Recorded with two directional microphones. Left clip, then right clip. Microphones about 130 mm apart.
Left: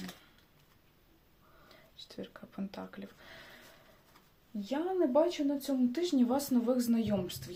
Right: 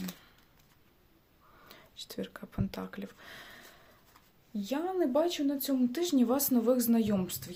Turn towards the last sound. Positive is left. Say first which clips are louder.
# right 1 dB
turn(degrees=-40)  # may be behind; listen again after turning